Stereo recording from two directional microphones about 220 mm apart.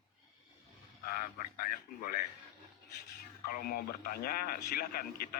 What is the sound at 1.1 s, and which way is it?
A man's voice, 40° left (ahead or behind).